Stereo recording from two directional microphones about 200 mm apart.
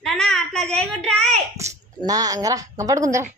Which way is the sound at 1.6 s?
15° right (ahead or behind).